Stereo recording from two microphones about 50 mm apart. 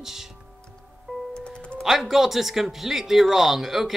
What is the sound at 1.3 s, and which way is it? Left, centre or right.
Music, centre.